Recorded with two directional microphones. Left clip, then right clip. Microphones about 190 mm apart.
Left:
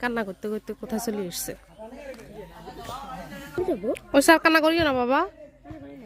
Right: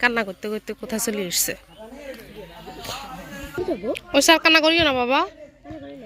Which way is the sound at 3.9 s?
35° left (ahead or behind).